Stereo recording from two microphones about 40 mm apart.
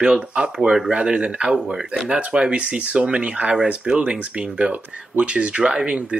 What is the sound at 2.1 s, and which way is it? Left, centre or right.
Speech, right.